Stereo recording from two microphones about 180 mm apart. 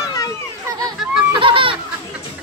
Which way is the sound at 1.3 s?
30° right (ahead or behind).